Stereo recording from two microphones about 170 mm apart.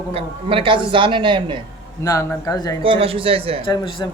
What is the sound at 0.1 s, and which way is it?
A man's voice, 35° right (ahead or behind).